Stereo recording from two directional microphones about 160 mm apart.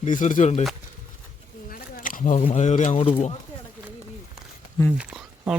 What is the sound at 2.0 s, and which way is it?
Speech, 60° left (ahead or behind).